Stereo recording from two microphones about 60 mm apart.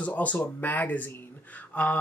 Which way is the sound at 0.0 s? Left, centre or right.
Left.